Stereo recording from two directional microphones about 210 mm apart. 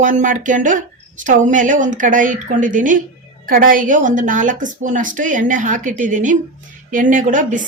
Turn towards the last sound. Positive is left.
turn(degrees=-40)  # may be behind; listen again after turning